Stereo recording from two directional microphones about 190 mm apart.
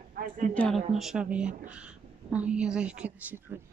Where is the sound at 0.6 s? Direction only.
Centre (ahead or behind).